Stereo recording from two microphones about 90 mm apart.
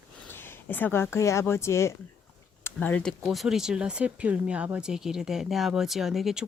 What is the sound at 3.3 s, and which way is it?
Speech, 5° right (ahead or behind).